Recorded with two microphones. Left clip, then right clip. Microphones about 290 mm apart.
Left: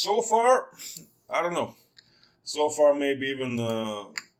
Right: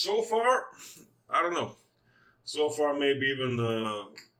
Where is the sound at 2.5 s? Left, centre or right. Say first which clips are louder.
Left 6 dB; left.